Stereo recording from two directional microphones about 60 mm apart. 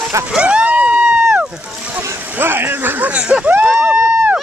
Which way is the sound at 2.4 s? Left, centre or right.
Right.